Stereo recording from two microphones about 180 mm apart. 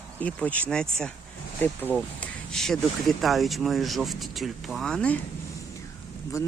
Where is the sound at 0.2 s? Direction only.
10° left (ahead or behind).